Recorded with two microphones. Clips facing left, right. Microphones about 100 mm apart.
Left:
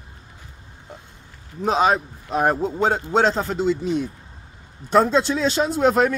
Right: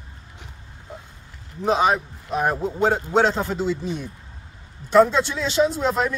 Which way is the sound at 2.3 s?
40° left (ahead or behind).